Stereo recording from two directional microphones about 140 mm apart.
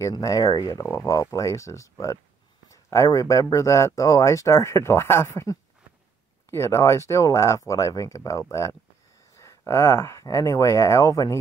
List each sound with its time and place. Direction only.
0.0 s speech: 25° left (ahead or behind)